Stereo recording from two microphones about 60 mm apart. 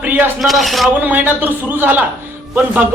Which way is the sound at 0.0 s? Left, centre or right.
Right.